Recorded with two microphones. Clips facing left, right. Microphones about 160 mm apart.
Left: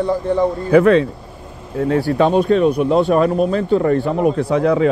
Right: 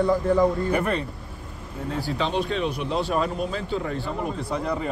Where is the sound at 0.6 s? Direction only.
90° left.